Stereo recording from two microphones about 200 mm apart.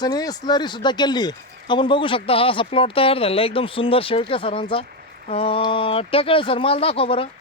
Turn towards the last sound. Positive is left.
turn(degrees=25)  # may be behind; listen again after turning